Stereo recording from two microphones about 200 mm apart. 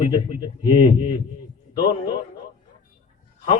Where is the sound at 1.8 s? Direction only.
25° left (ahead or behind).